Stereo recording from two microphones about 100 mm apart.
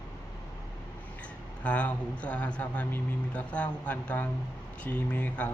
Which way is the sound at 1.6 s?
15° left (ahead or behind).